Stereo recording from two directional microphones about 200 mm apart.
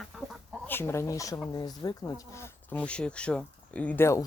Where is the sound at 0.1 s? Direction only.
Centre (ahead or behind).